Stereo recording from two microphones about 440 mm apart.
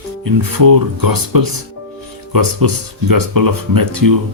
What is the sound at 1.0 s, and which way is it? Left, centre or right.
Speech, right.